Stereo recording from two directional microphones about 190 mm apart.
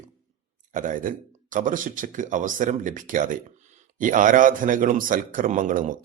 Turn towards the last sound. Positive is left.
turn(degrees=-45)  # may be behind; listen again after turning